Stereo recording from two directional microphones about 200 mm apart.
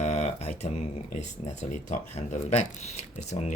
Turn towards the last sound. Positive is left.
turn(degrees=35)  # may be behind; listen again after turning